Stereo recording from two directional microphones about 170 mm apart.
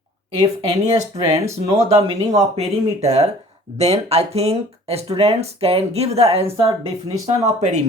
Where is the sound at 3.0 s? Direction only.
40° right (ahead or behind).